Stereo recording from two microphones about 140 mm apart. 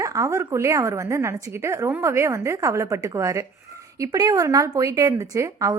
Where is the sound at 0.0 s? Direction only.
25° right (ahead or behind).